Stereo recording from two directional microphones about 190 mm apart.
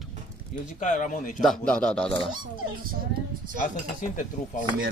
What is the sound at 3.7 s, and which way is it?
Speech, 40° left (ahead or behind).